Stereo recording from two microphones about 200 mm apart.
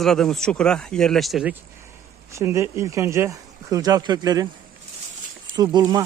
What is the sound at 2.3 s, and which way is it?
Speech, 15° right (ahead or behind).